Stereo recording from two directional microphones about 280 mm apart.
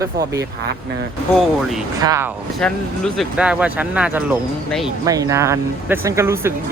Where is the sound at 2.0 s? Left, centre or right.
Centre.